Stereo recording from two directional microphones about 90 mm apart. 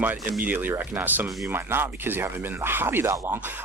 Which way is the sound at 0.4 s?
20° right (ahead or behind).